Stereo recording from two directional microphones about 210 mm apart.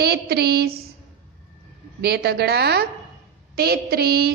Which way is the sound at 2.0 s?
50° right (ahead or behind).